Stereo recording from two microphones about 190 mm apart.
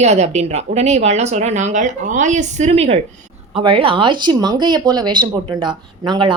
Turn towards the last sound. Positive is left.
turn(degrees=-25)  # may be behind; listen again after turning